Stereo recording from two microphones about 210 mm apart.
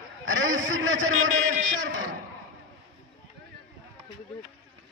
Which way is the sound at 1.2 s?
35° right (ahead or behind).